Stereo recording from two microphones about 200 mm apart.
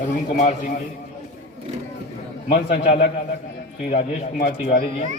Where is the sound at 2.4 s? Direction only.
35° left (ahead or behind).